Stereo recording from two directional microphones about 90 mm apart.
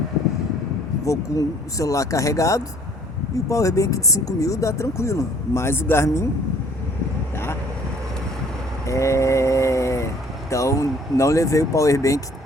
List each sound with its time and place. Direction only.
1.0 s speech: 35° left (ahead or behind)
8.9 s a sound: 35° left (ahead or behind)
10.5 s speech: 35° left (ahead or behind)